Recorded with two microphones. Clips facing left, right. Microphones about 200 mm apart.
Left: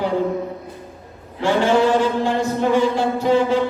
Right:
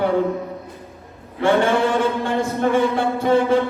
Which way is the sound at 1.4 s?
55° right (ahead or behind).